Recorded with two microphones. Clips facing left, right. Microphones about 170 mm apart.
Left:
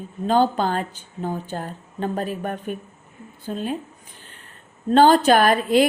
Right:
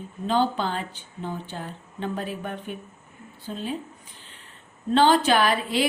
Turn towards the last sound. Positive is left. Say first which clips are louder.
# left 6 dB
turn(degrees=50)  # may be behind; listen again after turning